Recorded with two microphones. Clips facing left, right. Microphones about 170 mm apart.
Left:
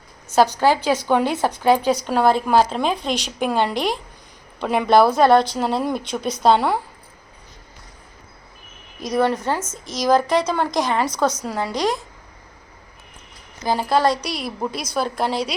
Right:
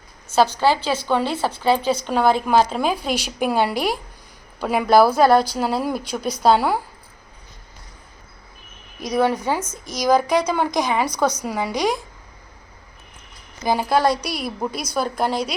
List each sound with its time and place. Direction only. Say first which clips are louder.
0.3 s a woman's voice: left 1 dB; 15° left (ahead or behind)
2.0 s a woman's voice: even; centre (ahead or behind)
9.0 s a woman's voice: even; centre (ahead or behind)
9.6 s speech: left 1 dB; 25° left (ahead or behind)
10.2 s a woman's voice: even; centre (ahead or behind)
13.7 s a woman's voice: left 1 dB; centre (ahead or behind)